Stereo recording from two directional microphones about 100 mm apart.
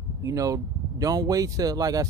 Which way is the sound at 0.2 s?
35° right (ahead or behind).